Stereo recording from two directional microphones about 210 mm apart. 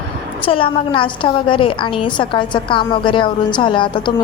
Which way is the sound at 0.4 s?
25° left (ahead or behind).